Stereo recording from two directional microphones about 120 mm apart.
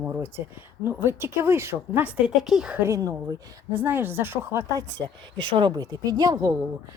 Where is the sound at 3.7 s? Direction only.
15° right (ahead or behind).